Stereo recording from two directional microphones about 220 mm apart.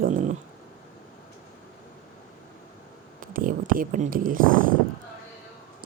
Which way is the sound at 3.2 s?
40° right (ahead or behind).